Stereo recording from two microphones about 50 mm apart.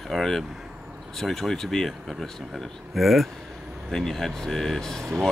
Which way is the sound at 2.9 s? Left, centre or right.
Centre.